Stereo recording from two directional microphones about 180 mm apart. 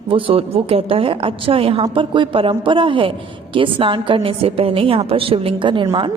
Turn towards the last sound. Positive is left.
turn(degrees=-25)  # may be behind; listen again after turning